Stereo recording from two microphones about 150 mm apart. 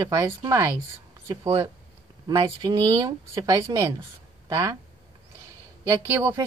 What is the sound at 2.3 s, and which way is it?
Speech, 35° right (ahead or behind).